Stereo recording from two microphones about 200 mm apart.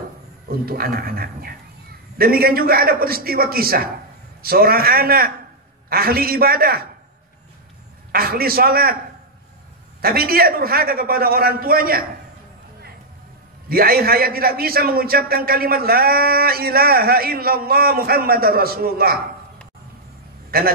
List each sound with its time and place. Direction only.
0.7 s a man's voice: 50° right (ahead or behind)
8.1 s a man's voice: 50° right (ahead or behind)
10.0 s a man's voice: 50° right (ahead or behind)
13.7 s a man's voice: 50° right (ahead or behind)
20.5 s a man's voice: 50° right (ahead or behind)